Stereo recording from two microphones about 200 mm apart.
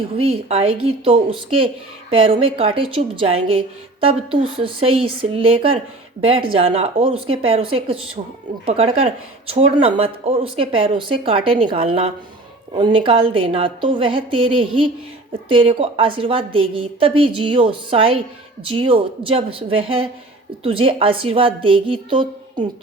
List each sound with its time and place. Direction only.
0.2 s speech: 30° right (ahead or behind)